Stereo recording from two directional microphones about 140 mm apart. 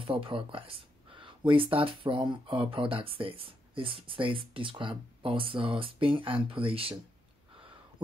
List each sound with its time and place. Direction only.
0.0 s speech: 40° right (ahead or behind)